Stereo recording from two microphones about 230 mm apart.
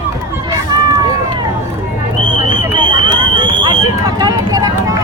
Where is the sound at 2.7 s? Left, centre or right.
Right.